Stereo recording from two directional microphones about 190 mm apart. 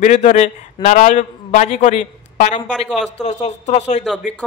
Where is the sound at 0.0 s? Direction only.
40° left (ahead or behind).